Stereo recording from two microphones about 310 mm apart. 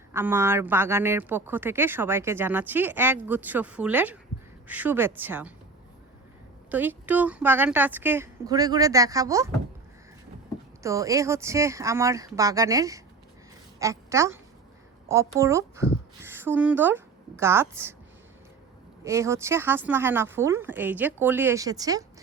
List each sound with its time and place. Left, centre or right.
0.1 s a woman's voice: centre
6.7 s a woman's voice: centre
10.8 s a woman's voice: centre
19.0 s a woman's voice: centre